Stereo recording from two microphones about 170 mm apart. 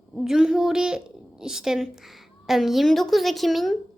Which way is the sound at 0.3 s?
5° right (ahead or behind).